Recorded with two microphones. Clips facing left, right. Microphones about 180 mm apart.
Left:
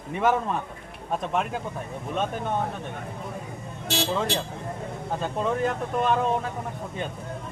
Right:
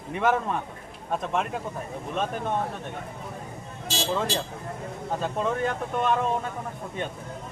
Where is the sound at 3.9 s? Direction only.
65° left (ahead or behind).